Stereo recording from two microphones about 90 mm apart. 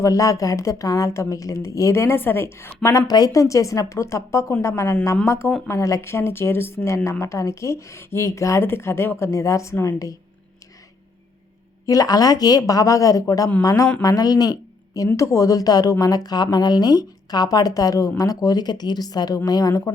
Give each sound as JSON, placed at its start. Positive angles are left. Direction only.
{"t": 0.0, "sound": "speech", "side_deg": 40}
{"t": 3.1, "sound": "speech", "side_deg": 45}
{"t": 11.9, "sound": "speech", "side_deg": 45}